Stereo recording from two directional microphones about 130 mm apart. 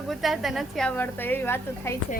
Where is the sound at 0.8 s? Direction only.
15° left (ahead or behind).